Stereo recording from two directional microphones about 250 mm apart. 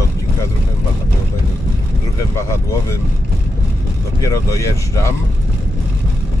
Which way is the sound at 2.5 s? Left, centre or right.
Centre.